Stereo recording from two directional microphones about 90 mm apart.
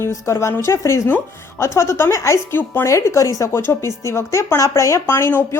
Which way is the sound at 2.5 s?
20° left (ahead or behind).